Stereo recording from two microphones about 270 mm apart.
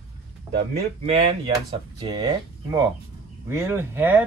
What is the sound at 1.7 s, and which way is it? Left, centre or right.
Speech, centre.